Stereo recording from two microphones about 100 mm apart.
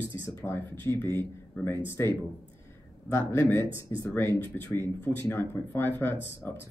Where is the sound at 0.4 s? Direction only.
20° left (ahead or behind).